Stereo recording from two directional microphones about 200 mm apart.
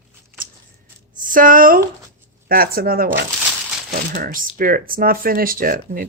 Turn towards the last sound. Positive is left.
turn(degrees=-45)  # may be behind; listen again after turning